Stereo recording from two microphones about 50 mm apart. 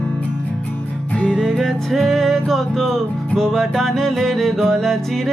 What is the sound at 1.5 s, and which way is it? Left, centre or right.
Music, centre.